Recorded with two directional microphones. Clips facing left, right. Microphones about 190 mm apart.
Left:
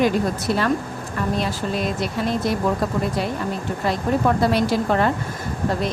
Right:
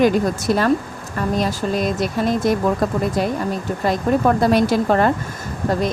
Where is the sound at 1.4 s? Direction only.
45° right (ahead or behind).